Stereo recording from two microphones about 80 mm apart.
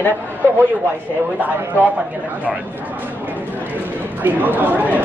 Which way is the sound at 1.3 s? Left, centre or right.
Centre.